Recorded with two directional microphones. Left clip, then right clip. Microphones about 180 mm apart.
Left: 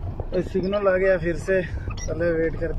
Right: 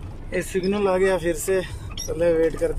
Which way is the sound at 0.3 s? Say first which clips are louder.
Even; 30° right (ahead or behind).